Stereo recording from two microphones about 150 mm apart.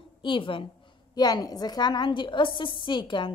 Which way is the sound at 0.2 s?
35° left (ahead or behind).